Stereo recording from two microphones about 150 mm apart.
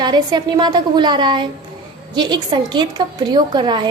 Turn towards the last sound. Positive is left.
turn(degrees=-30)  # may be behind; listen again after turning